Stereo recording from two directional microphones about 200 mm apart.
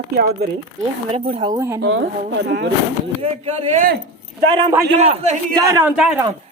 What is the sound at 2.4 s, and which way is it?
Speech, 60° right (ahead or behind).